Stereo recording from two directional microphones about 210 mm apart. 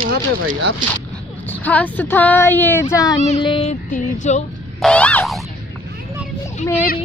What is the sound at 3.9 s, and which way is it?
Music, 35° left (ahead or behind).